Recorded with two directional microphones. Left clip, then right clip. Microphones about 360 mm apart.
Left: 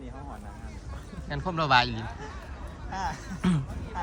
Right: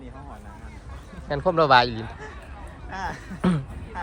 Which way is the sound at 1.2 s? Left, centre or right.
Centre.